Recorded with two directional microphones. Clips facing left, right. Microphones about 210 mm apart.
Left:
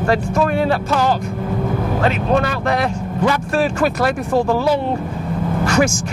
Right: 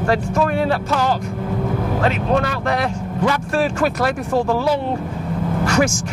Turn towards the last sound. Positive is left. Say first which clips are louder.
# left 1 dB
turn(degrees=15)  # may be behind; listen again after turning